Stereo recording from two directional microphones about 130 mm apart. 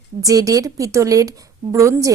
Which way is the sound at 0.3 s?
25° right (ahead or behind).